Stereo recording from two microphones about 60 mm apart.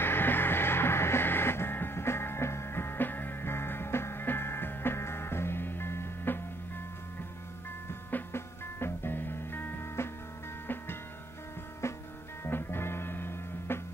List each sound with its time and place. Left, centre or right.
0.0 s music: left
7.9 s music: left
11.8 s music: left
12.4 s music: left